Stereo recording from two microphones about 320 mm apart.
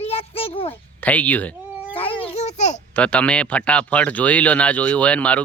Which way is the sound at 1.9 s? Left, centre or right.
Centre.